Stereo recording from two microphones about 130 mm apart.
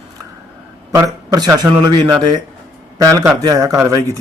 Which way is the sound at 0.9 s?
25° right (ahead or behind).